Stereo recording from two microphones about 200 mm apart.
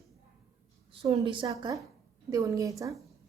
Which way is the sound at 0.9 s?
30° right (ahead or behind).